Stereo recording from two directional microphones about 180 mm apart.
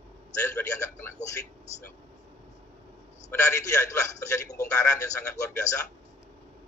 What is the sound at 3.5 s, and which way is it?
A man's voice, 15° left (ahead or behind).